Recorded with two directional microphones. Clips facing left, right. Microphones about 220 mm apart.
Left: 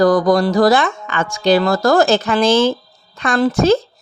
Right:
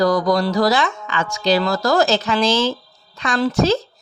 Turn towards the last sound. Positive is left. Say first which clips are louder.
# left 4 dB
turn(degrees=50)  # may be behind; listen again after turning